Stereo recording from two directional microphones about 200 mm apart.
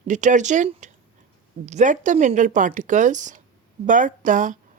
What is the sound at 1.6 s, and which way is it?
Speech, 35° right (ahead or behind).